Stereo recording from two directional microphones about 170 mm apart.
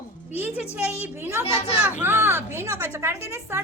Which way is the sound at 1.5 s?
40° left (ahead or behind).